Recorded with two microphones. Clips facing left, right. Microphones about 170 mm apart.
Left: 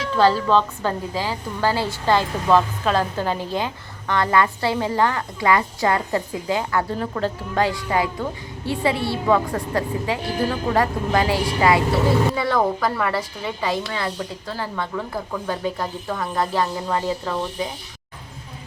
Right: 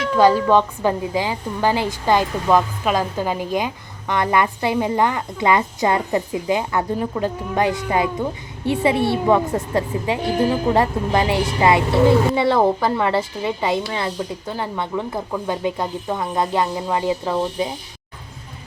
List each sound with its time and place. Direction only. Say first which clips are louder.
0.2 s a woman's voice: right 3 dB; 15° right (ahead or behind)